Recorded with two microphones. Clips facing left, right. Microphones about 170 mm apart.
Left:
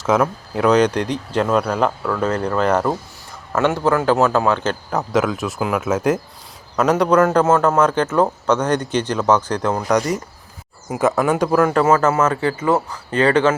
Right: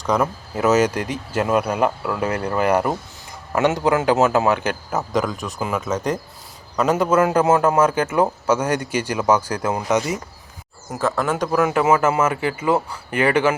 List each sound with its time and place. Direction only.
0.0 s a man's voice: centre (ahead or behind)
10.9 s a man's voice: 20° left (ahead or behind)
11.2 s a man's voice: 5° left (ahead or behind)
11.6 s a man's voice: 10° right (ahead or behind)